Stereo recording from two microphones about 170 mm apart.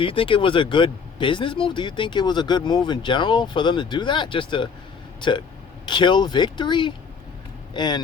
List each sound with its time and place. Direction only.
0.0 s speech: 30° left (ahead or behind)
5.8 s speech: 25° left (ahead or behind)